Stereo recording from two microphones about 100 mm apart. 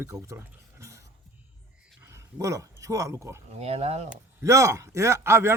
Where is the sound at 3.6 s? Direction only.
90° right.